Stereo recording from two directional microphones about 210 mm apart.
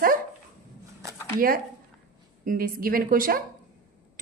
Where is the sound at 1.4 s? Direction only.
45° right (ahead or behind).